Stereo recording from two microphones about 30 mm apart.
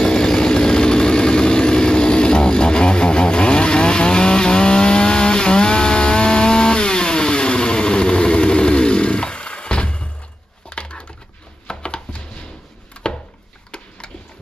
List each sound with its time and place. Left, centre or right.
0.0 s vehicle: left
10.7 s a sound: left
13.0 s chopping: left